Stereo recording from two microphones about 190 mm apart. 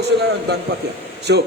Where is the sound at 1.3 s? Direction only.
70° right (ahead or behind).